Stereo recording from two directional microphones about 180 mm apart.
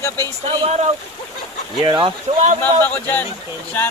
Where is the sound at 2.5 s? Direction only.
10° left (ahead or behind).